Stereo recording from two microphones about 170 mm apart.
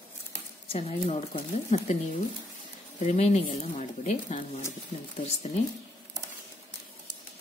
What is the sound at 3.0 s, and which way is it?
Speech, 40° left (ahead or behind).